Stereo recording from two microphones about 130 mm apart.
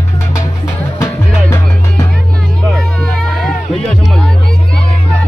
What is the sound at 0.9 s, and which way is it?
Music, 20° left (ahead or behind).